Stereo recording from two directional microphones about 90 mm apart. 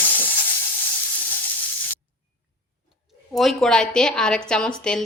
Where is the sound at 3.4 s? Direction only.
5° left (ahead or behind).